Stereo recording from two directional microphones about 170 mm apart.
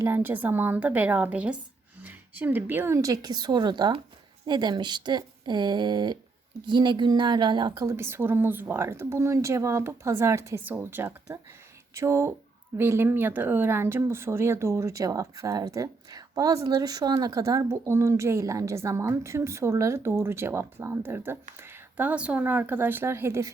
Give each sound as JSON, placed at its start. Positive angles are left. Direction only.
{"t": 0.0, "sound": "a woman's voice", "side_deg": -10}